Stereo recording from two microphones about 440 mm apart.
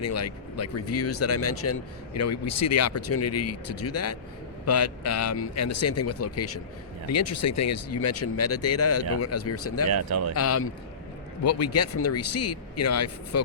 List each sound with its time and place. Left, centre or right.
0.0 s speech: left